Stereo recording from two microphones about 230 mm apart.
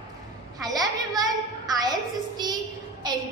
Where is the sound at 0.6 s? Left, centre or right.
Centre.